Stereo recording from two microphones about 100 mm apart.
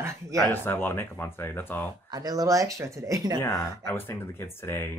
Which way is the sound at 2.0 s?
40° right (ahead or behind).